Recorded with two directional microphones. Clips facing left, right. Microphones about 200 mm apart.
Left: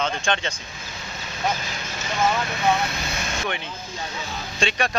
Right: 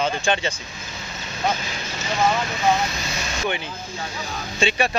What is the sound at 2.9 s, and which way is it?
Vehicle, 55° left (ahead or behind).